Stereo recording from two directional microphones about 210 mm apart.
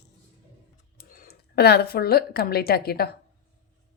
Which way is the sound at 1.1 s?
45° left (ahead or behind).